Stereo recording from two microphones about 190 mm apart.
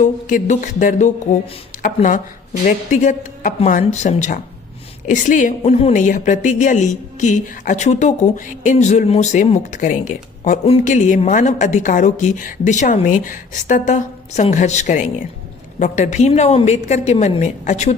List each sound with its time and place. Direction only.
0.0 s a woman's voice: 40° left (ahead or behind)